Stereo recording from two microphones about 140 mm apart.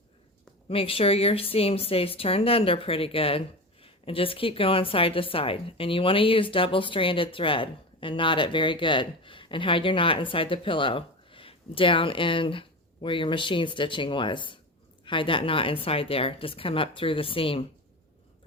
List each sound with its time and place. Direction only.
0.7 s speech: 40° left (ahead or behind)